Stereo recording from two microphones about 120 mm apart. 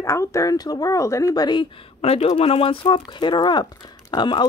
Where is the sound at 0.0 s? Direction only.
25° left (ahead or behind).